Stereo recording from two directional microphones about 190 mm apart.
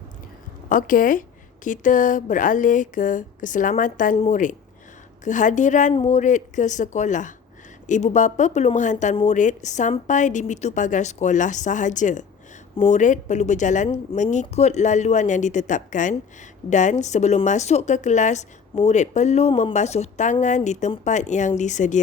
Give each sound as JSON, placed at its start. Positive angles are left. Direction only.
{"t": 0.7, "sound": "speech", "side_deg": 45}
{"t": 18.7, "sound": "speech", "side_deg": 25}
{"t": 18.9, "sound": "speech", "side_deg": 40}